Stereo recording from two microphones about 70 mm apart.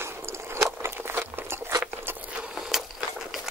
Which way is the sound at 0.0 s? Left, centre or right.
Right.